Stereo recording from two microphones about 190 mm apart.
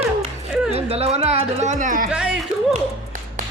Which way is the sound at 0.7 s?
30° right (ahead or behind).